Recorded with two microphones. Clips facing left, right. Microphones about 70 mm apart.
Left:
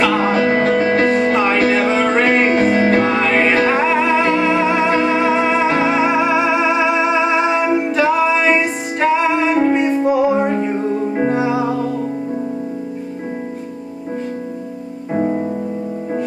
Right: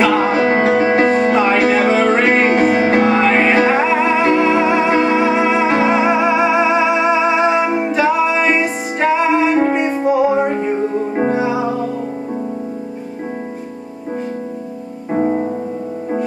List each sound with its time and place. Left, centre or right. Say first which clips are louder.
0.0 s music: right 1 dB; centre
2.2 s music: right 1 dB; right; by 4.3 s centre
4.3 s music: right 2 dB; right
4.6 s music: right 1 dB; centre
15.1 s music: right 2 dB; centre